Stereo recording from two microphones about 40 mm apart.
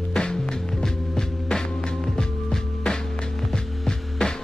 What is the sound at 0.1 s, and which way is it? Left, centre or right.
Music, centre.